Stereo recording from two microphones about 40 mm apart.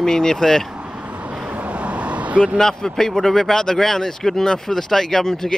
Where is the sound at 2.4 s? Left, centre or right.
Centre.